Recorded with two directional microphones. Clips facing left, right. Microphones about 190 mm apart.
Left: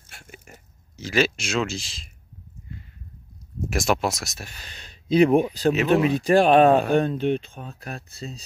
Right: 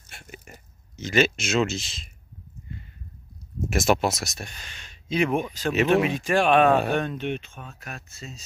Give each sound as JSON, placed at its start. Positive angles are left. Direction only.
{"t": 0.1, "sound": "a sound", "side_deg": 0}
{"t": 1.0, "sound": "speech", "side_deg": 0}
{"t": 3.7, "sound": "speech", "side_deg": 0}
{"t": 4.6, "sound": "speech", "side_deg": 35}